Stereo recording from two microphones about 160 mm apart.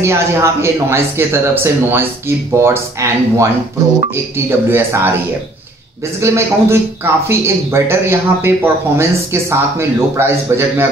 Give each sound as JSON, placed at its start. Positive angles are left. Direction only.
{"t": 0.0, "sound": "speech", "side_deg": -15}
{"t": 6.1, "sound": "speech", "side_deg": -15}